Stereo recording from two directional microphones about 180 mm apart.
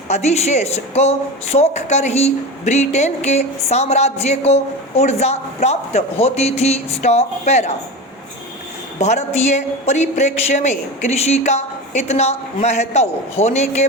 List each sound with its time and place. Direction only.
0.1 s speech: 40° left (ahead or behind)
9.0 s speech: 40° left (ahead or behind)